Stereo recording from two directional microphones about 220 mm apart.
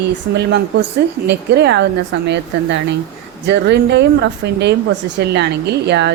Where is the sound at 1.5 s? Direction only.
50° right (ahead or behind).